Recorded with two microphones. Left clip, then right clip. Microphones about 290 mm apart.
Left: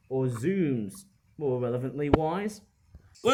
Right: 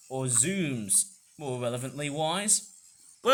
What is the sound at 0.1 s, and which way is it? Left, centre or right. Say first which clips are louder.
A man's voice: left 2 dB; centre.